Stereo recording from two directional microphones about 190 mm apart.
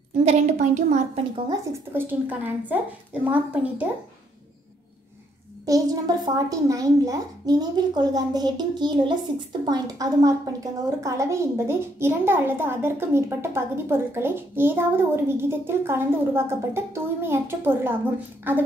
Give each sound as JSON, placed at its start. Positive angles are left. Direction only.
{"t": 0.2, "sound": "a child's voice", "side_deg": -35}
{"t": 1.5, "sound": "a woman's voice", "side_deg": -10}
{"t": 5.7, "sound": "a woman's voice", "side_deg": -20}